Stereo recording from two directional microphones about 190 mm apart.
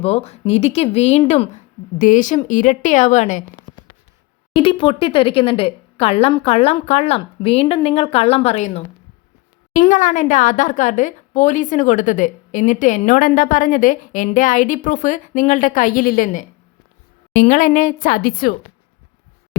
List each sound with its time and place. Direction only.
0.0 s a woman's voice: 30° left (ahead or behind)
4.5 s a woman's voice: 30° left (ahead or behind); by 18.5 s 50° left (ahead or behind)